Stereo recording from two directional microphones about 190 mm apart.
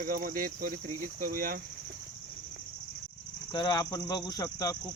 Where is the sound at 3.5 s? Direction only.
20° left (ahead or behind).